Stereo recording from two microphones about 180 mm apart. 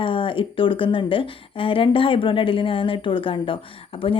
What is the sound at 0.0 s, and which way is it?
Speech, 30° left (ahead or behind).